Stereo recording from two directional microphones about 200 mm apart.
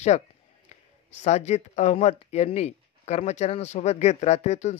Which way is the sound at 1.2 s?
35° left (ahead or behind).